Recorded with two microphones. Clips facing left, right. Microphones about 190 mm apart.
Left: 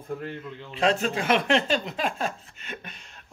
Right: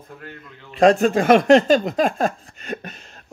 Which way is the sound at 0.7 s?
50° right (ahead or behind).